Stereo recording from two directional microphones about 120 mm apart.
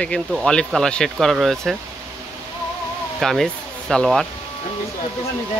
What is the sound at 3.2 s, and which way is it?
Speech, centre (ahead or behind).